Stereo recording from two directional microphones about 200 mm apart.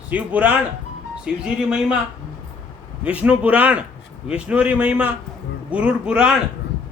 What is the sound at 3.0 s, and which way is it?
A man's voice, 5° right (ahead or behind).